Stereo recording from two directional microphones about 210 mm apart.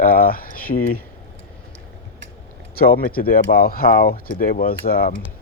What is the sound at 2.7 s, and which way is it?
Speech, 45° left (ahead or behind).